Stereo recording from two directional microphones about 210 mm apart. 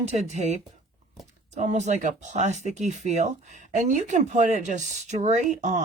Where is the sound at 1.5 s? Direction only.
35° right (ahead or behind).